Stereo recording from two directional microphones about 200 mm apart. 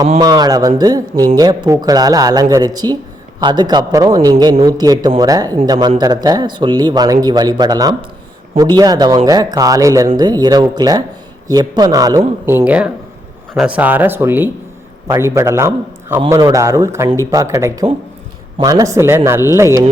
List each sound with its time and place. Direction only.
0.2 s speech: 20° right (ahead or behind)